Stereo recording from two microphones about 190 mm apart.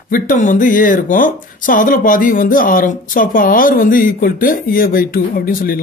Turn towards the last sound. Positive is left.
turn(degrees=50)  # may be behind; listen again after turning